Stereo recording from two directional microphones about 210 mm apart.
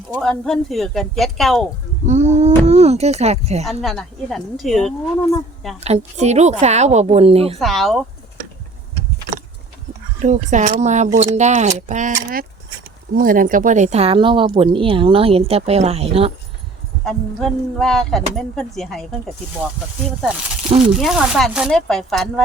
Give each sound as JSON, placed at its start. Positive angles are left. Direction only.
{"t": 0.1, "sound": "speech", "side_deg": 0}
{"t": 2.0, "sound": "speech", "side_deg": -35}
{"t": 3.7, "sound": "speech", "side_deg": 0}
{"t": 5.8, "sound": "speech", "side_deg": -30}
{"t": 7.6, "sound": "speech", "side_deg": 0}
{"t": 10.2, "sound": "speech", "side_deg": -35}
{"t": 13.1, "sound": "speech", "side_deg": -40}
{"t": 17.1, "sound": "speech", "side_deg": 0}
{"t": 20.8, "sound": "speech", "side_deg": -5}